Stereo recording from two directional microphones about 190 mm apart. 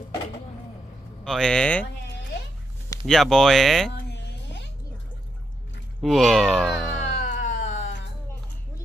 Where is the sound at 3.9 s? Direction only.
65° left (ahead or behind).